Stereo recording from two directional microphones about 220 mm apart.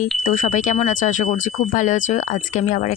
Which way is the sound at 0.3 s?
35° left (ahead or behind).